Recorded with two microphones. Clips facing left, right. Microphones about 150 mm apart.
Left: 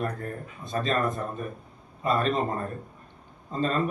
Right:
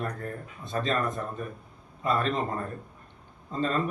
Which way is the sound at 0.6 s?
25° right (ahead or behind).